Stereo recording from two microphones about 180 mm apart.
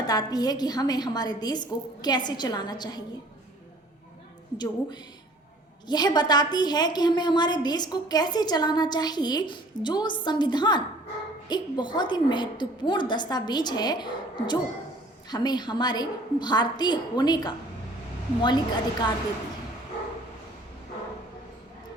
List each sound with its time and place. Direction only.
0.1 s a woman's voice: 20° left (ahead or behind)
4.5 s a woman's voice: 25° left (ahead or behind)